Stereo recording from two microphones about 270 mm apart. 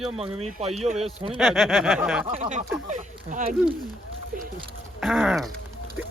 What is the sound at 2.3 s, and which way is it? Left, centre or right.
Speech, right.